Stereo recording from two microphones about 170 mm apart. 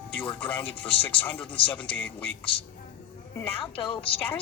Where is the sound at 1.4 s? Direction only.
30° left (ahead or behind).